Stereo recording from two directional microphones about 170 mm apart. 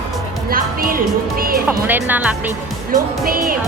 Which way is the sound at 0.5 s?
55° right (ahead or behind).